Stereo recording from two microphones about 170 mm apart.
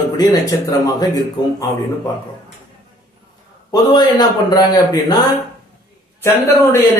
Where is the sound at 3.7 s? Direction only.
25° left (ahead or behind).